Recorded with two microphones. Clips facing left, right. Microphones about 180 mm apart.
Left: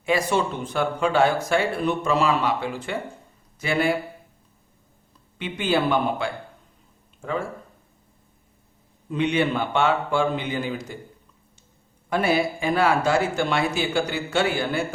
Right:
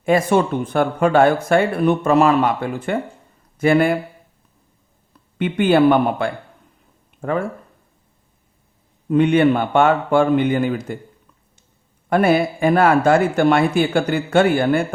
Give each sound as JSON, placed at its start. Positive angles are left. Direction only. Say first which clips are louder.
{"t": 0.0, "sound": "speech", "louder": "right 6 dB", "side_deg": -50}
{"t": 5.4, "sound": "speech", "louder": "right 9 dB", "side_deg": -55}
{"t": 9.0, "sound": "speech", "louder": "right 8 dB", "side_deg": -55}
{"t": 12.0, "sound": "speech", "louder": "right 6 dB", "side_deg": -55}